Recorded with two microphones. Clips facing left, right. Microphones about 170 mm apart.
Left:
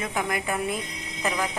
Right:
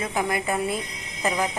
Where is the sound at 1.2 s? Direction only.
15° right (ahead or behind).